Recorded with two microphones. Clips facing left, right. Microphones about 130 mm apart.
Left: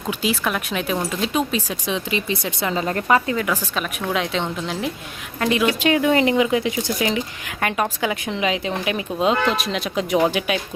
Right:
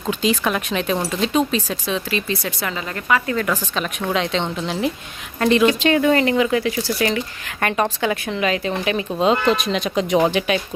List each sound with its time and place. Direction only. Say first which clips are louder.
0.1 s speech: right 3 dB; 5° left (ahead or behind); by 2.7 s 20° left (ahead or behind)
2.7 s a woman's voice: left 3 dB; 35° left (ahead or behind)
3.3 s speech: right 1 dB; 10° left (ahead or behind)